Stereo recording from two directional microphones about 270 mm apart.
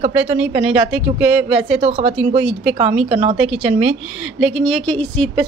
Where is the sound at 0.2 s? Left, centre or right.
Centre.